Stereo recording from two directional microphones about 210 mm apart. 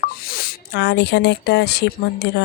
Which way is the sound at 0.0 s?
45° left (ahead or behind).